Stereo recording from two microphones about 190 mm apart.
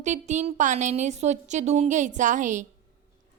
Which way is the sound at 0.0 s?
40° right (ahead or behind).